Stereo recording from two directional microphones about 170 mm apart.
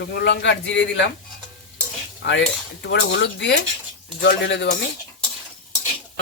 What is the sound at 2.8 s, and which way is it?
A man's voice, 85° left.